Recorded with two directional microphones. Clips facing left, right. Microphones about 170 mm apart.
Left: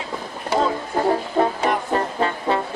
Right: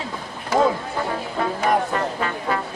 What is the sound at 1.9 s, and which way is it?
Music, 30° left (ahead or behind).